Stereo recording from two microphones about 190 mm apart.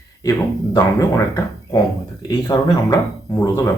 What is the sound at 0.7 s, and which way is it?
Speech, 15° left (ahead or behind).